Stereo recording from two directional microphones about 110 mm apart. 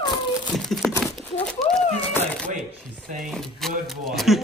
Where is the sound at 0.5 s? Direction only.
5° left (ahead or behind).